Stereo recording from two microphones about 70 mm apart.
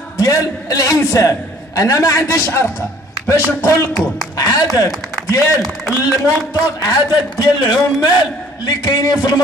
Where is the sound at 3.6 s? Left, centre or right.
Left.